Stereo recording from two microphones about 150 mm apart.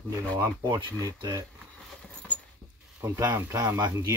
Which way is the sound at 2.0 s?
5° left (ahead or behind).